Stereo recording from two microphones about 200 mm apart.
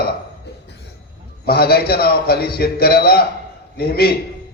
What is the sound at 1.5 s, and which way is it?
A man's voice, 50° left (ahead or behind).